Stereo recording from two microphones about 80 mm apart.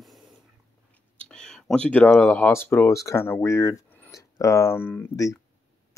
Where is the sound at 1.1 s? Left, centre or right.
Centre.